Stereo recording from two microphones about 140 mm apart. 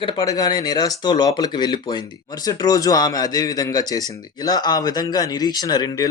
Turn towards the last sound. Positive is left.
turn(degrees=25)  # may be behind; listen again after turning